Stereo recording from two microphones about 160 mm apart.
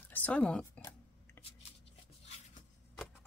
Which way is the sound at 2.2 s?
40° left (ahead or behind).